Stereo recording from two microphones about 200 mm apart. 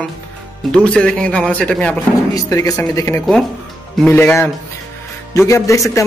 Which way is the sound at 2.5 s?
15° left (ahead or behind).